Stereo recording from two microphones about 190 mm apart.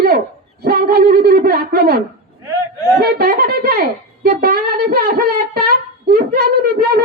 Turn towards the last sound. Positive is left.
turn(degrees=-55)  # may be behind; listen again after turning